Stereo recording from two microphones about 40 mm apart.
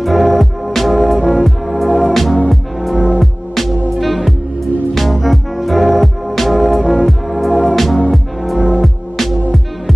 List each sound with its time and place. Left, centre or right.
0.0 s music: centre
8.5 s music: right
8.8 s music: centre